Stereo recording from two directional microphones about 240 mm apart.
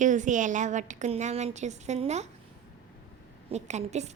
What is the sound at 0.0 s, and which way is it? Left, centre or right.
A woman's voice, right.